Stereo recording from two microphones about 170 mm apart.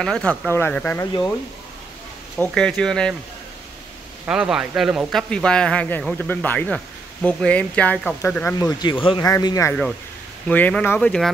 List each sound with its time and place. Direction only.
0.0 s speech: 5° left (ahead or behind)
2.3 s speech: 5° left (ahead or behind)
4.3 s speech: 5° right (ahead or behind); by 8.5 s 10° left (ahead or behind)
8.5 s speech: 25° left (ahead or behind)
10.5 s speech: 10° left (ahead or behind)